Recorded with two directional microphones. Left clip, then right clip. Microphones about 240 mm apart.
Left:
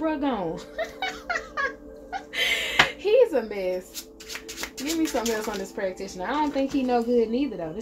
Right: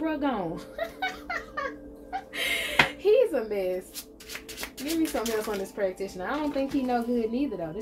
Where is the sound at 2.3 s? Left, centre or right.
Left.